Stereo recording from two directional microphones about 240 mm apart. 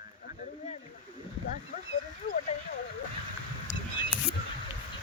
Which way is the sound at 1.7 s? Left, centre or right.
Left.